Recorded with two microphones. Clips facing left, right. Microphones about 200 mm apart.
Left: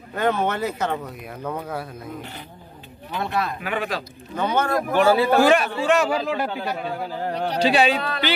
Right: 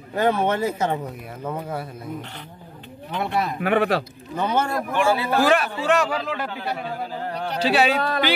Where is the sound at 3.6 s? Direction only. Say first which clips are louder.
Right 7 dB; 60° right (ahead or behind).